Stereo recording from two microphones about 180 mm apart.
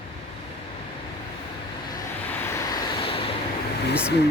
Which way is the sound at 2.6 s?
25° left (ahead or behind).